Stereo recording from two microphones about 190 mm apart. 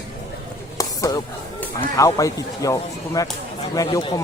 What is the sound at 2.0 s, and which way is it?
Speech, 20° left (ahead or behind).